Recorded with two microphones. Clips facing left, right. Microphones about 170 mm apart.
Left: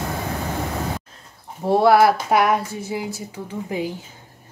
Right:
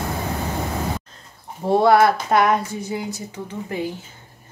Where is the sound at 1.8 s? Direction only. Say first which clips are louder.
Left 1 dB; 5° left (ahead or behind).